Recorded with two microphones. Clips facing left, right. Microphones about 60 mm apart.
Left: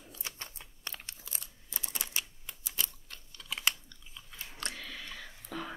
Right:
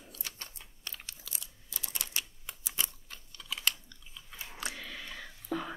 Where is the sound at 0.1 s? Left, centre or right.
Left.